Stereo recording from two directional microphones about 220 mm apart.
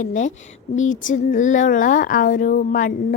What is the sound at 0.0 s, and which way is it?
Speech, 35° left (ahead or behind).